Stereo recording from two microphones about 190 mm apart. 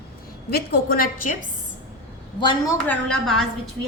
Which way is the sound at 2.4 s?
20° left (ahead or behind).